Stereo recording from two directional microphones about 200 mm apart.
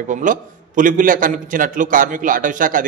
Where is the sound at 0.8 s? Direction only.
40° right (ahead or behind).